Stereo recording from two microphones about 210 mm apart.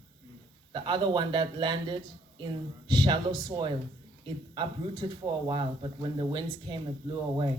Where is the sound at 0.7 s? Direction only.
20° right (ahead or behind).